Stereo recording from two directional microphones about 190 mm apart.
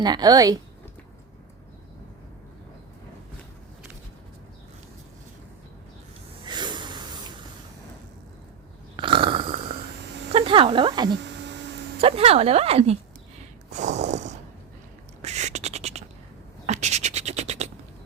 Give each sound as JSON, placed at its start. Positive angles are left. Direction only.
{"t": 0.0, "sound": "a woman's voice", "side_deg": -20}
{"t": 6.4, "sound": "snort", "side_deg": -25}
{"t": 9.0, "sound": "a sound", "side_deg": -25}
{"t": 10.3, "sound": "speech", "side_deg": -30}
{"t": 11.2, "sound": "a sound", "side_deg": -65}
{"t": 11.9, "sound": "a woman's voice", "side_deg": -30}
{"t": 13.7, "sound": "a sound", "side_deg": -40}
{"t": 15.2, "sound": "beatboxing", "side_deg": -35}
{"t": 16.6, "sound": "scratch", "side_deg": -35}